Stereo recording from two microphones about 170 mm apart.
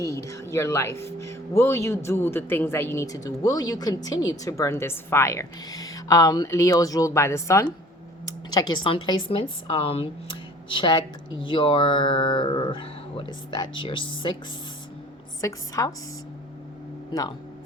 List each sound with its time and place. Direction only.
0.0 s speech: 20° left (ahead or behind)
15.4 s speech: 20° left (ahead or behind)
17.1 s speech: 25° left (ahead or behind)